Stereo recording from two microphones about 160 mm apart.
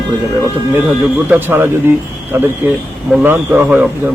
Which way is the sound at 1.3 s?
15° right (ahead or behind).